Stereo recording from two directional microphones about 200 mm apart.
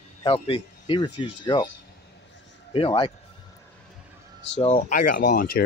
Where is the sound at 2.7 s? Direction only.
25° left (ahead or behind).